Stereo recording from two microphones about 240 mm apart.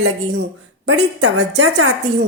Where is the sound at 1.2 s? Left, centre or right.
Right.